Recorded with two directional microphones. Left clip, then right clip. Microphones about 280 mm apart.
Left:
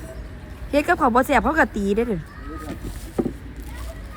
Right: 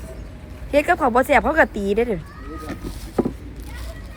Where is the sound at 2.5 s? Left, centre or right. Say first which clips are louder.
Right 3 dB; centre.